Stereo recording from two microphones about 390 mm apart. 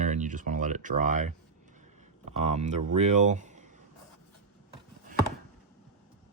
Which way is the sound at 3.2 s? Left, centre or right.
Centre.